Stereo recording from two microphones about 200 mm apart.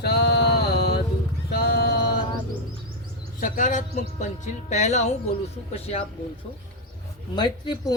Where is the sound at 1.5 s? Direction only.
50° left (ahead or behind).